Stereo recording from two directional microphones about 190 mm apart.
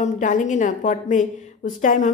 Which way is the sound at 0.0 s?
40° left (ahead or behind).